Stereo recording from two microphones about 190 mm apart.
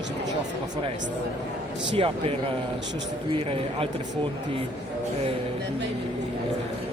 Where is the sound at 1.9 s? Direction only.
30° right (ahead or behind).